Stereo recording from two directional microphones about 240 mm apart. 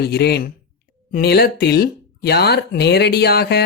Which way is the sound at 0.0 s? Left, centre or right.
Left.